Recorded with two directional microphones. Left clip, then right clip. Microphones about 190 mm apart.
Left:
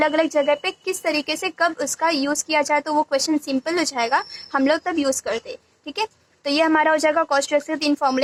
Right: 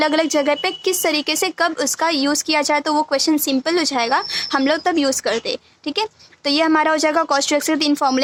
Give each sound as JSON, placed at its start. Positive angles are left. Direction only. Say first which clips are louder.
{"t": 0.0, "sound": "a woman's voice", "louder": "right 2 dB", "side_deg": -30}